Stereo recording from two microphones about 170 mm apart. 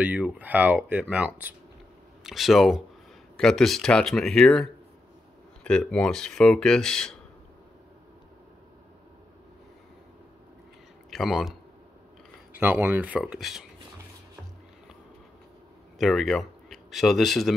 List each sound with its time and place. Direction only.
0.0 s speech: 10° right (ahead or behind)
11.1 s speech: centre (ahead or behind)
12.5 s speech: 10° right (ahead or behind)
16.0 s speech: centre (ahead or behind)